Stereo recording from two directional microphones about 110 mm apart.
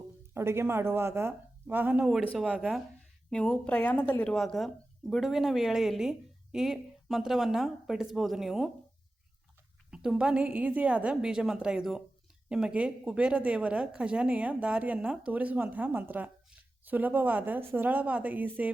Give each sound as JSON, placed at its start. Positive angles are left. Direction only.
{"t": 0.3, "sound": "a woman's voice", "side_deg": -25}
{"t": 3.2, "sound": "speech", "side_deg": 5}
{"t": 9.9, "sound": "a woman's voice", "side_deg": -5}